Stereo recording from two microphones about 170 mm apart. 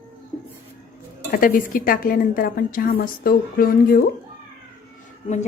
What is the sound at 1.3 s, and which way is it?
A woman's voice, 55° left (ahead or behind).